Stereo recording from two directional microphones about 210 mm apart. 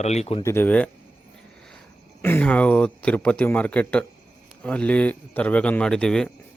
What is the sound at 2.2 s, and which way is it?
A man's voice, 10° left (ahead or behind).